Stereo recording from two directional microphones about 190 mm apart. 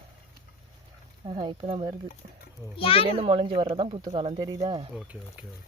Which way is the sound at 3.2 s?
30° right (ahead or behind).